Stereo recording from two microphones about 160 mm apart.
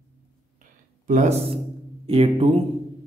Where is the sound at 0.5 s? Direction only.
55° right (ahead or behind).